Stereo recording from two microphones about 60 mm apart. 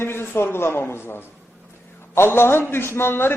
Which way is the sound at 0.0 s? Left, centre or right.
Left.